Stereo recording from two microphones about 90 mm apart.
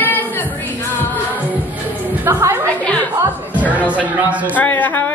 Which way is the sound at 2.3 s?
35° right (ahead or behind).